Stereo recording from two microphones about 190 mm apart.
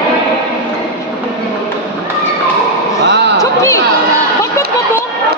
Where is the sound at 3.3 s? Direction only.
15° left (ahead or behind).